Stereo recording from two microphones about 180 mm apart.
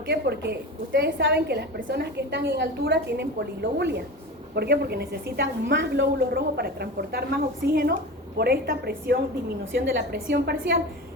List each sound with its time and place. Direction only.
0.1 s a woman's voice: 65° right (ahead or behind)
9.7 s a woman's voice: 70° right (ahead or behind)